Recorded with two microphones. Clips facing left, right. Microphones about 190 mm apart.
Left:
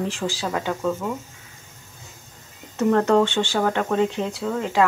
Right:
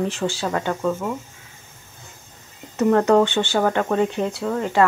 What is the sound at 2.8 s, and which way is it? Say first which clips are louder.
Speech: right 2 dB; 5° right (ahead or behind).